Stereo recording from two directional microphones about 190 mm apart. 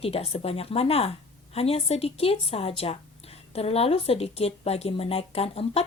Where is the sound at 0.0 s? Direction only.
30° left (ahead or behind).